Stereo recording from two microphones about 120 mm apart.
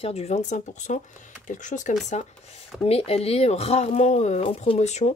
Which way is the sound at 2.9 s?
60° left (ahead or behind).